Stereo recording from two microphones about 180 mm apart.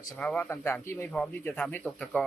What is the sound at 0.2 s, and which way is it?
Speech, 5° left (ahead or behind).